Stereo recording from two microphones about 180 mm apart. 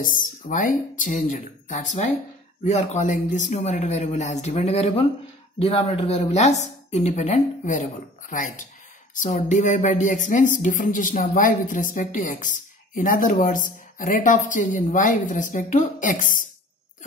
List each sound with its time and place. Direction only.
0.0 s speech: 45° left (ahead or behind)